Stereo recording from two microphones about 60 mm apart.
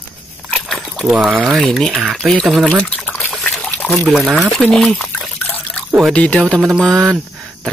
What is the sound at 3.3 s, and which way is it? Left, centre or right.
Pig, centre.